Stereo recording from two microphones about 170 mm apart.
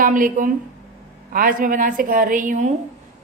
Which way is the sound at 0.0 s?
55° right (ahead or behind).